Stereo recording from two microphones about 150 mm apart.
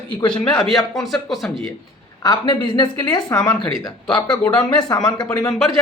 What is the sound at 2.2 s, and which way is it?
A woman's voice, 30° left (ahead or behind).